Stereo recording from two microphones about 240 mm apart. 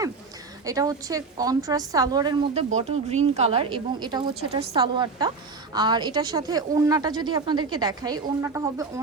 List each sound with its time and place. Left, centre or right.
0.6 s speech: centre
2.7 s speech: right; by 8.9 s centre